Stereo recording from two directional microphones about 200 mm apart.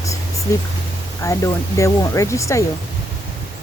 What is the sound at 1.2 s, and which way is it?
Speech, 15° left (ahead or behind).